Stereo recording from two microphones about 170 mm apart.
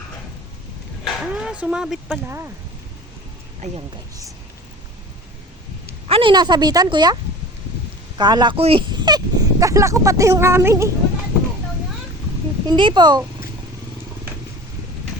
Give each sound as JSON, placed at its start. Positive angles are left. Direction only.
{"t": 1.0, "sound": "speech", "side_deg": -5}
{"t": 6.1, "sound": "speech", "side_deg": -30}
{"t": 8.2, "sound": "speech", "side_deg": -25}
{"t": 12.6, "sound": "speech", "side_deg": -25}